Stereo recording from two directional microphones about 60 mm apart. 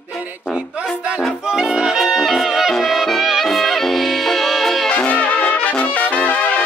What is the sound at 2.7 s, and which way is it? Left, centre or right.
Music, centre.